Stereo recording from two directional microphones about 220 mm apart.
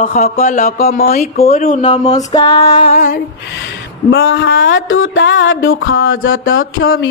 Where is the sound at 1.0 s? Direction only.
45° left (ahead or behind).